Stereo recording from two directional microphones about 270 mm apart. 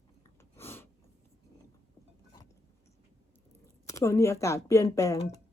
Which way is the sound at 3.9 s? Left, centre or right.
Centre.